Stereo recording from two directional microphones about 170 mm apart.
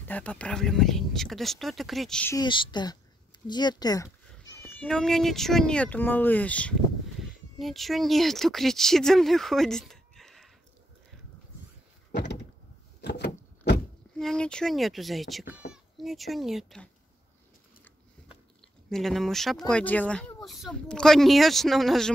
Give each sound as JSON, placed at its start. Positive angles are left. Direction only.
{"t": 0.0, "sound": "speech", "side_deg": 10}
{"t": 2.3, "sound": "speech", "side_deg": 30}
{"t": 4.7, "sound": "speech", "side_deg": 5}
{"t": 13.0, "sound": "a sound", "side_deg": 80}
{"t": 14.1, "sound": "speech", "side_deg": 5}
{"t": 18.9, "sound": "speech", "side_deg": 0}